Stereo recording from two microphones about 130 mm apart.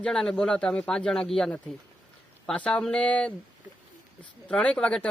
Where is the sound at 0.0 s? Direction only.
5° left (ahead or behind).